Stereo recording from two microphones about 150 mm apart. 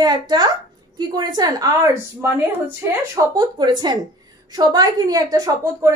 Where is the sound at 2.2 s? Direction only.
15° right (ahead or behind).